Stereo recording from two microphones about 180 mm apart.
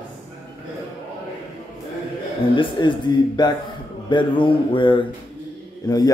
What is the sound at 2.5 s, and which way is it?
A man's voice, 25° left (ahead or behind).